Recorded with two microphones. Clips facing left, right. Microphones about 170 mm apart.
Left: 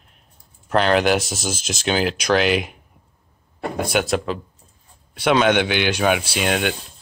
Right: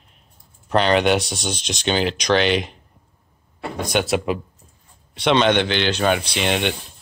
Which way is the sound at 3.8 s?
5° left (ahead or behind).